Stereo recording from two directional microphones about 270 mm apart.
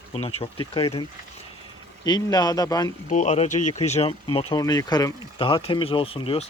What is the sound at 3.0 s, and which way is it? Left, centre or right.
Speech, left.